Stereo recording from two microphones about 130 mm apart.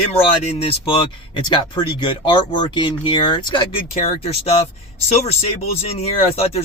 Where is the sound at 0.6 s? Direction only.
45° left (ahead or behind).